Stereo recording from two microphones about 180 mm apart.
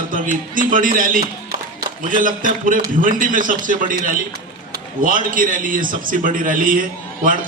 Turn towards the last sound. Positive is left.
turn(degrees=-50)  # may be behind; listen again after turning